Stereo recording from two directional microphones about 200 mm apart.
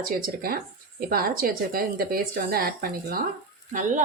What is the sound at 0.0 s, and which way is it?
A woman's voice, 45° right (ahead or behind).